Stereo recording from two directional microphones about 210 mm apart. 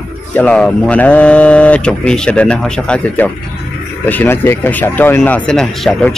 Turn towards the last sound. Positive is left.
turn(degrees=5)  # may be behind; listen again after turning